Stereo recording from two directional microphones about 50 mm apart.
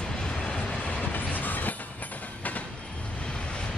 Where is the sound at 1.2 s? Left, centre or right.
Left.